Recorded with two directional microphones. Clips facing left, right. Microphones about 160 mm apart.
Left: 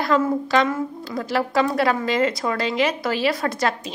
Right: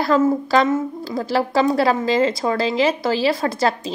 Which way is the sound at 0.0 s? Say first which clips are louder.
Right 3 dB; 35° right (ahead or behind).